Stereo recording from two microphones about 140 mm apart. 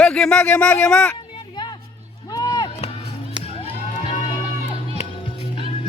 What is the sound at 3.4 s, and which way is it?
Music, 45° left (ahead or behind).